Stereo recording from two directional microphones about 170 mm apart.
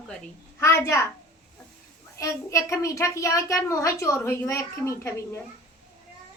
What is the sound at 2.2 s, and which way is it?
A child's voice, 20° left (ahead or behind).